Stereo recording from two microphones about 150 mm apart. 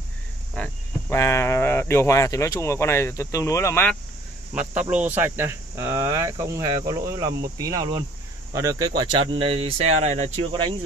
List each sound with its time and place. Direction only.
1.1 s speech: 15° left (ahead or behind)
4.8 s speech: 10° right (ahead or behind); by 10.4 s 50° right (ahead or behind)